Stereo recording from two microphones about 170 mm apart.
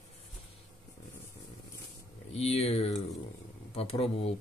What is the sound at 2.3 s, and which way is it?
Speech, 35° left (ahead or behind).